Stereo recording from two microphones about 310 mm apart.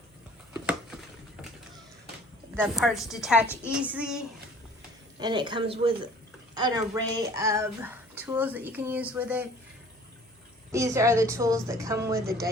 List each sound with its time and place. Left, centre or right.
0.5 s a sound: centre
2.6 s a woman's voice: centre
5.2 s a woman's voice: centre
10.7 s a woman's voice: centre